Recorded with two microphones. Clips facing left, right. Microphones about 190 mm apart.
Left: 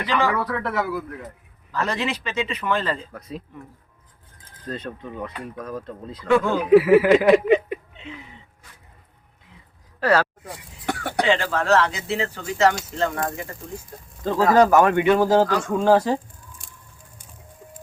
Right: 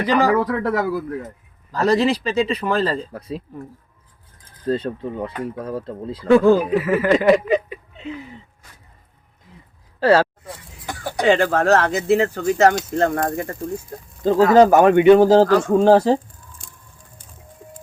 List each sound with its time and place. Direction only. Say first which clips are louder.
0.0 s speech: right 6 dB; 40° right (ahead or behind)
4.7 s speech: right 9 dB; 30° right (ahead or behind)
6.7 s speech: left 4 dB; 10° left (ahead or behind)
10.0 s speech: right 5 dB; 30° right (ahead or behind)
10.8 s a sound: left 2 dB; 65° left (ahead or behind)
11.3 s speech: right 6 dB; 50° right (ahead or behind)
14.3 s speech: right 4 dB; 30° right (ahead or behind)